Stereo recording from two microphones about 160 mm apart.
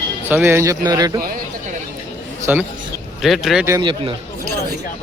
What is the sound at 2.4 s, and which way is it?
Speech, 10° right (ahead or behind).